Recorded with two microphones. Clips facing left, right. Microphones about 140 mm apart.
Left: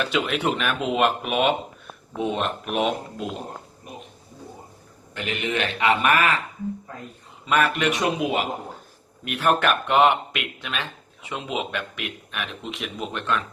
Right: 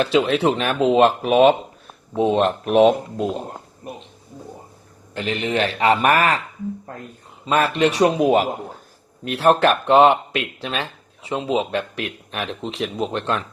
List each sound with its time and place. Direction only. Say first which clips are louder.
0.0 s speech: right 7 dB; 30° right (ahead or behind)
5.1 s speech: right 5 dB; 35° right (ahead or behind)
6.9 s a man's voice: right 4 dB; 50° right (ahead or behind)
7.4 s speech: right 4 dB; 30° right (ahead or behind)